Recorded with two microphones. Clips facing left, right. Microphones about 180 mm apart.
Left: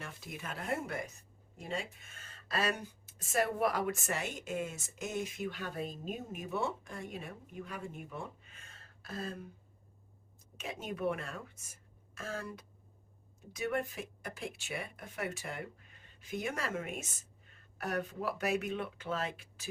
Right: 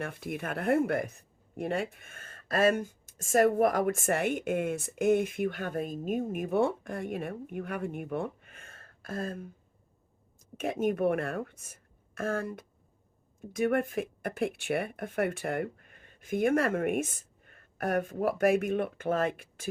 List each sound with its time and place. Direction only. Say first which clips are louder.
0.0 s speech: right 10 dB; 55° right (ahead or behind)
10.6 s speech: right 9 dB; 55° right (ahead or behind)